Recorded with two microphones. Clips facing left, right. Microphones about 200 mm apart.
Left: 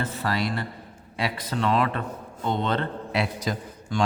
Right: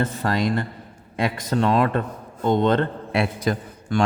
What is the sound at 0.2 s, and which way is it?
A man's voice, 45° right (ahead or behind).